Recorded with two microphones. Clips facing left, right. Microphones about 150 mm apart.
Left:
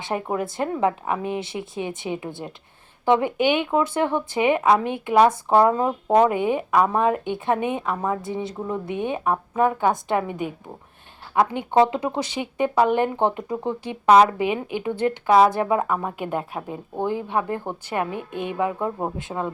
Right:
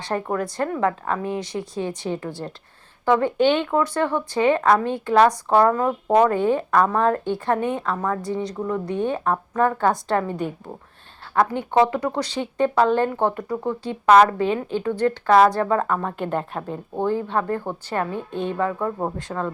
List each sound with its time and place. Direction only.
0.1 s a woman's voice: 15° left (ahead or behind)